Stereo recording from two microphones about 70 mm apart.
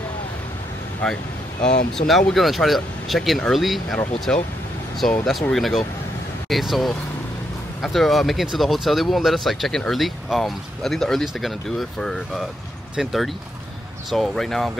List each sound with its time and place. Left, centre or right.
1.0 s speech: centre
1.6 s speech: centre
4.3 s speech: centre